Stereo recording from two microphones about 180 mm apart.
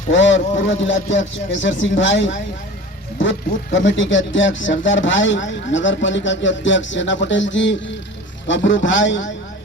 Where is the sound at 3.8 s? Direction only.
90° left.